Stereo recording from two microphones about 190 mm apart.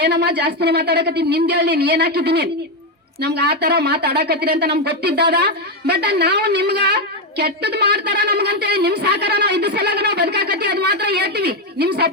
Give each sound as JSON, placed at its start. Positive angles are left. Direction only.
{"t": 0.0, "sound": "speech", "side_deg": -60}